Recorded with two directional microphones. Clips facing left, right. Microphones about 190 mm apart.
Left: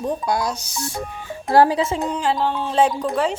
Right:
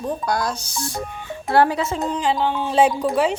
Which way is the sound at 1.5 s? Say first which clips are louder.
Left 2 dB; 35° left (ahead or behind).